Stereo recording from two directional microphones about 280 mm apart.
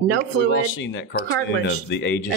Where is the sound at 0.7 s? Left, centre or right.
Left.